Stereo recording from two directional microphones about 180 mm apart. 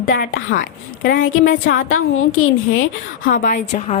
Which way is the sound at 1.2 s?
90° left.